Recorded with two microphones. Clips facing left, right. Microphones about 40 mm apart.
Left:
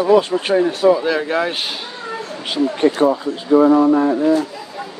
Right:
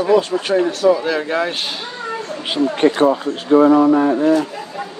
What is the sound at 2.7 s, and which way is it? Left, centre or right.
Speech, right.